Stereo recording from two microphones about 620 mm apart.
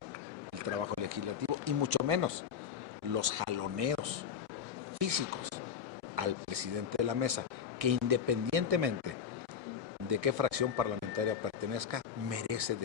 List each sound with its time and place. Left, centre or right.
0.7 s speech: right
10.0 s speech: right